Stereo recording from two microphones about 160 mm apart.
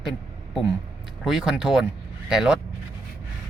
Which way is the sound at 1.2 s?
5° right (ahead or behind).